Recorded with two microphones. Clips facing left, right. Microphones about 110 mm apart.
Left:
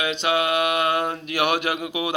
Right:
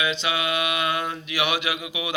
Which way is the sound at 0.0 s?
50° left (ahead or behind).